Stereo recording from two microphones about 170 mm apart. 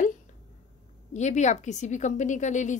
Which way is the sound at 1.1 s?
45° left (ahead or behind).